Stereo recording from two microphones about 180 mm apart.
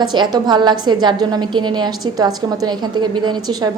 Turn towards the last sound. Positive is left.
turn(degrees=-25)  # may be behind; listen again after turning